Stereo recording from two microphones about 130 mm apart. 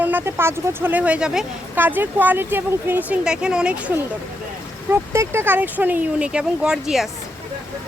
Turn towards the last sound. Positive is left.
turn(degrees=-5)  # may be behind; listen again after turning